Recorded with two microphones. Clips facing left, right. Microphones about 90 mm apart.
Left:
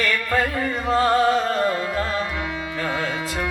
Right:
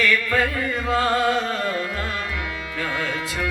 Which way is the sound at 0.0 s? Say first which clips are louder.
Right 1 dB; 40° left (ahead or behind).